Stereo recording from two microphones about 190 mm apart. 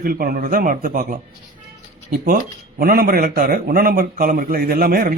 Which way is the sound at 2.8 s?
50° right (ahead or behind).